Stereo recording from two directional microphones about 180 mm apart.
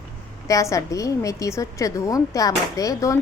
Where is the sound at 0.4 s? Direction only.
15° left (ahead or behind).